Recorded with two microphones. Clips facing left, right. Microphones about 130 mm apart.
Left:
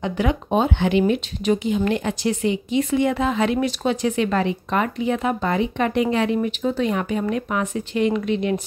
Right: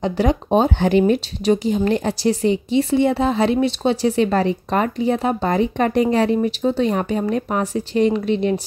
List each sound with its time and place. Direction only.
0.0 s speech: 35° right (ahead or behind)